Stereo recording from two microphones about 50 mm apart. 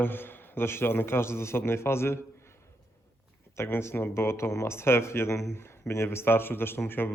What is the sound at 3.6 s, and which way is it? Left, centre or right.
Speech, left.